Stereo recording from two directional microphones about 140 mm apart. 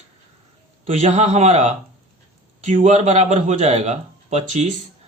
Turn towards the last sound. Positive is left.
turn(degrees=-60)  # may be behind; listen again after turning